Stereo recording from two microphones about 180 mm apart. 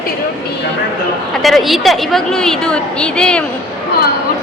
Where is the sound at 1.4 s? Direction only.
Centre (ahead or behind).